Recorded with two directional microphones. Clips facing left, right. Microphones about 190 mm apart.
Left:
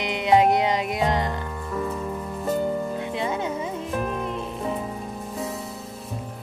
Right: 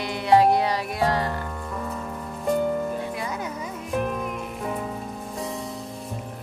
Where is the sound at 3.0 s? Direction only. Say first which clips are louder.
Left 3 dB; 25° left (ahead or behind).